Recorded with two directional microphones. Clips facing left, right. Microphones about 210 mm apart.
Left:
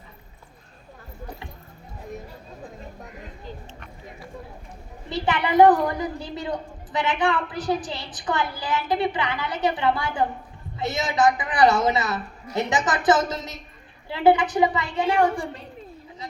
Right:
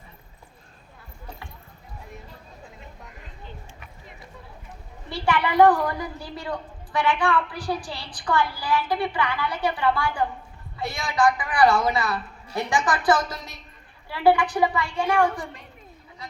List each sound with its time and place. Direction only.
5.0 s a woman's voice: 20° left (ahead or behind)